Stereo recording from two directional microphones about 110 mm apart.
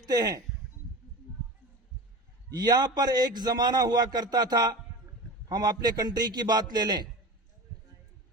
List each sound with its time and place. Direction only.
0.0 s speech: 35° right (ahead or behind)
2.6 s a man's voice: 35° right (ahead or behind)